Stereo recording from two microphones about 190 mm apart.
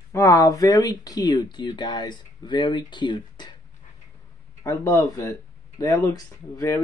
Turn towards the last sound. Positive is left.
turn(degrees=15)  # may be behind; listen again after turning